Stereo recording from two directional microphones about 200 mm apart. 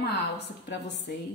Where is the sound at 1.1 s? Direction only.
55° left (ahead or behind).